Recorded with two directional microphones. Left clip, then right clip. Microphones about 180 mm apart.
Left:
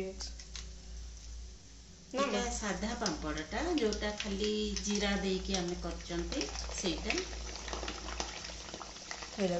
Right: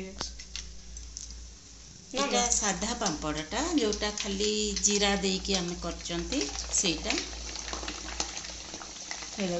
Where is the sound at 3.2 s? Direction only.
55° right (ahead or behind).